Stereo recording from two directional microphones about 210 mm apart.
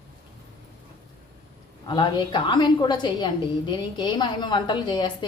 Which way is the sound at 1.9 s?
20° left (ahead or behind).